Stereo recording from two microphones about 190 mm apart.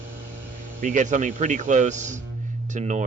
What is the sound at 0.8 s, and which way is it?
Speech, 40° right (ahead or behind).